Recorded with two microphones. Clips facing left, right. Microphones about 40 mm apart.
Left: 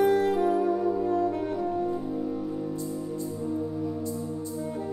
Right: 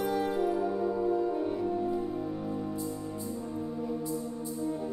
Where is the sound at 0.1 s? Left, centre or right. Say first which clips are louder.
Left 6 dB; left.